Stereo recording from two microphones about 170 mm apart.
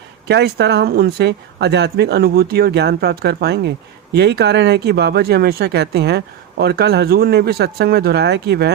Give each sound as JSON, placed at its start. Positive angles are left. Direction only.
{"t": 0.3, "sound": "speech", "side_deg": -75}